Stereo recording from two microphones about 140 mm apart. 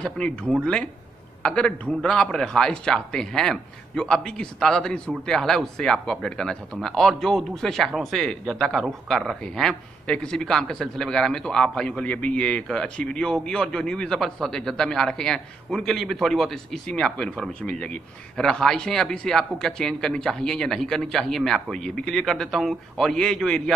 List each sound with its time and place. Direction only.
0.0 s speech: 5° left (ahead or behind)